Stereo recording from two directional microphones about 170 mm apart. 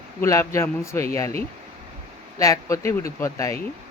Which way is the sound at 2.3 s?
20° left (ahead or behind).